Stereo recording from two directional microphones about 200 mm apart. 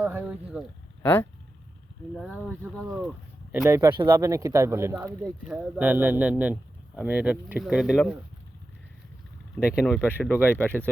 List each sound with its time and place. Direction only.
0.0 s speech: 10° right (ahead or behind)
1.0 s speech: 10° left (ahead or behind)
3.5 s speech: 15° right (ahead or behind)
9.6 s speech: 5° right (ahead or behind)